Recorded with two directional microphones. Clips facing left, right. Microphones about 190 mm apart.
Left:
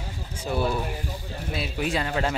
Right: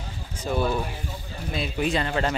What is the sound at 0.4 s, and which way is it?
Speech, 10° left (ahead or behind).